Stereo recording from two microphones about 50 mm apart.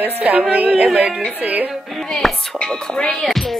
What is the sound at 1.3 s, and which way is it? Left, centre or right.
Speech, right.